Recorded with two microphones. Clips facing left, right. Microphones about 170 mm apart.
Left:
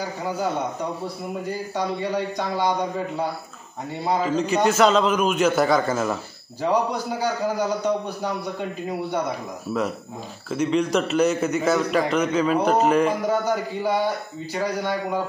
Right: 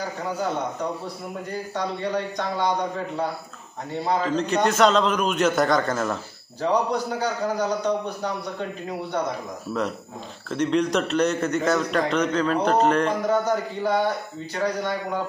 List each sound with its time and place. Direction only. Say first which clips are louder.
1.5 s a man's voice: left 1 dB; 5° left (ahead or behind)
4.1 s a man's voice: left 1 dB; 5° left (ahead or behind)
10.5 s a man's voice: left 1 dB; 5° left (ahead or behind)